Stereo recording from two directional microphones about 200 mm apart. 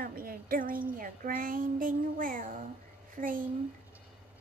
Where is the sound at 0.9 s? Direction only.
45° right (ahead or behind).